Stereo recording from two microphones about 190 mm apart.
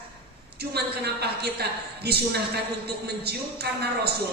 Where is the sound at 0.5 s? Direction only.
55° right (ahead or behind).